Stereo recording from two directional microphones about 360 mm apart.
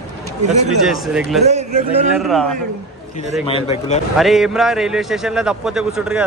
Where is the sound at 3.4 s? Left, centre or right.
Centre.